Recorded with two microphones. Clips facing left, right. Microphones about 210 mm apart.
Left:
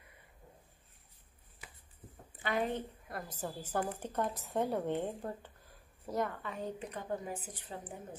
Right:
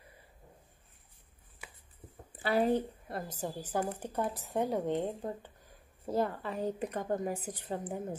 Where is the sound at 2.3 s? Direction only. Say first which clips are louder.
Right 6 dB; 35° right (ahead or behind).